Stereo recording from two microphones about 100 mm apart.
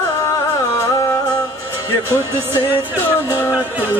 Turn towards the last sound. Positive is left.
turn(degrees=-20)  # may be behind; listen again after turning